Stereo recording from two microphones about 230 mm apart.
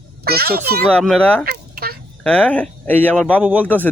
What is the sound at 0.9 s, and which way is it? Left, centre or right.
Speech, centre.